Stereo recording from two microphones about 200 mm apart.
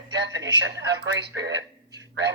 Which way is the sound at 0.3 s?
60° right (ahead or behind).